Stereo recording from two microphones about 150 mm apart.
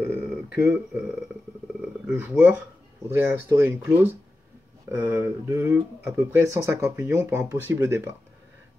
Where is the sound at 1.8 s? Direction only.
10° right (ahead or behind).